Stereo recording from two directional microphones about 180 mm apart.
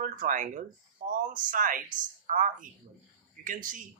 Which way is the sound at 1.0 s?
50° right (ahead or behind).